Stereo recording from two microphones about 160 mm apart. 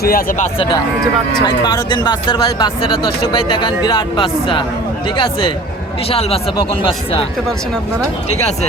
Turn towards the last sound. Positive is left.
turn(degrees=35)  # may be behind; listen again after turning